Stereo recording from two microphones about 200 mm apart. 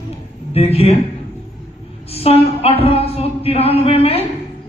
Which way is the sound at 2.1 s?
30° left (ahead or behind).